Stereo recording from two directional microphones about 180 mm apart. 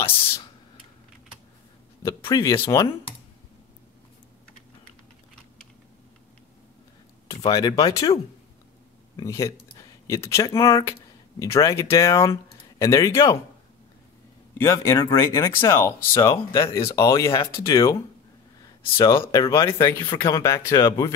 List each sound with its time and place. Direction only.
2.0 s speech: 15° left (ahead or behind)
7.2 s speech: 20° left (ahead or behind)
14.6 s speech: 15° left (ahead or behind)
18.9 s speech: 15° left (ahead or behind)
19.4 s speech: 30° left (ahead or behind)
19.7 s speech: 15° left (ahead or behind)